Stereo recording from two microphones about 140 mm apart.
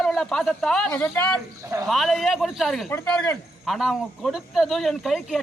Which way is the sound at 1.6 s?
25° right (ahead or behind).